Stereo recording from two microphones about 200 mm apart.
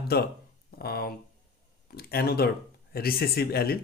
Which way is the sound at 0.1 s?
50° left (ahead or behind).